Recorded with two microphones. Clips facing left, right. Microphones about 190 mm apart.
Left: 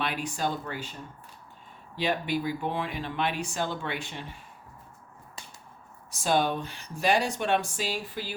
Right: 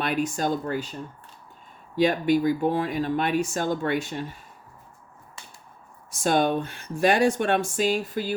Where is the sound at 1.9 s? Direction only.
45° right (ahead or behind).